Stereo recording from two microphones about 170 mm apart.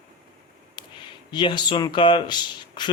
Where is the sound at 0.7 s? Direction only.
25° left (ahead or behind).